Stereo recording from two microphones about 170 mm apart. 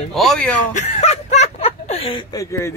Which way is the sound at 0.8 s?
45° left (ahead or behind).